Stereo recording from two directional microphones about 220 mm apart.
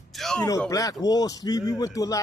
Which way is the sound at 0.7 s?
15° left (ahead or behind).